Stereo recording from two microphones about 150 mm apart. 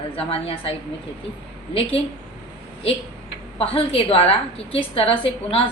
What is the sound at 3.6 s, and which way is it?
A woman's voice, 40° left (ahead or behind).